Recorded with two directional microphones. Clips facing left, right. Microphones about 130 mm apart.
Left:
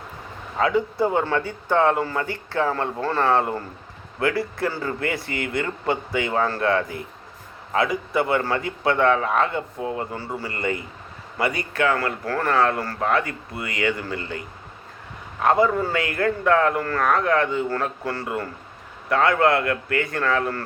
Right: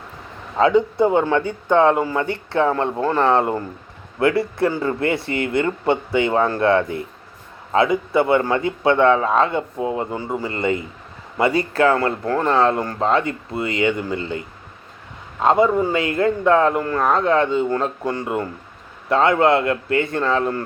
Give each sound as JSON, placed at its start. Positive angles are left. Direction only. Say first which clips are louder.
{"t": 0.5, "sound": "a man's voice", "louder": "right 6 dB", "side_deg": -25}